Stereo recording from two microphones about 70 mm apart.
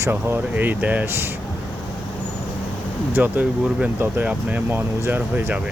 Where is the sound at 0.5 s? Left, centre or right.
Right.